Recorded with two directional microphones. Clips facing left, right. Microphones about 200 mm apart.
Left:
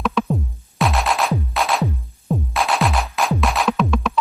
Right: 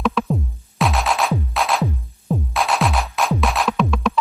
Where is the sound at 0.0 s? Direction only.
Centre (ahead or behind).